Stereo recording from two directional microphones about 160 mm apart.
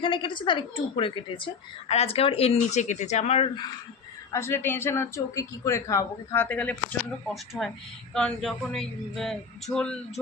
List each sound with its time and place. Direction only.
0.0 s speech: 30° left (ahead or behind)
4.3 s speech: 15° left (ahead or behind)
7.3 s speech: centre (ahead or behind)